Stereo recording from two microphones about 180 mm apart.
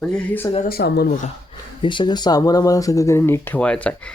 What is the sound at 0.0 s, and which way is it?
Speech, 5° left (ahead or behind).